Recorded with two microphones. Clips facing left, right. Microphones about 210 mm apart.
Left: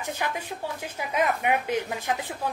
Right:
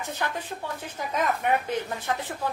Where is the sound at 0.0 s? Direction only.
10° left (ahead or behind).